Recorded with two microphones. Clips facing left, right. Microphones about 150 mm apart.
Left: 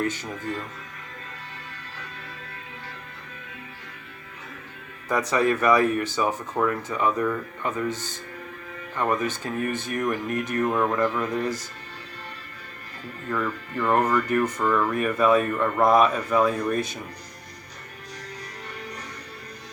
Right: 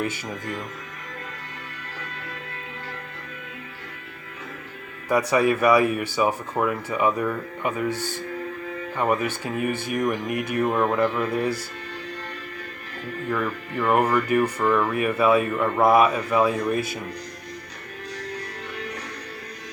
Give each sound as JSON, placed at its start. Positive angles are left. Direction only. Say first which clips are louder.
{"t": 5.0, "sound": "speech", "louder": "right 2 dB", "side_deg": -10}
{"t": 13.3, "sound": "speech", "louder": "even", "side_deg": -10}